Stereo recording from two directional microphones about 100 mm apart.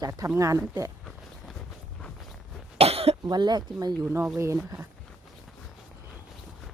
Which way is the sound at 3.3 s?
45° right (ahead or behind).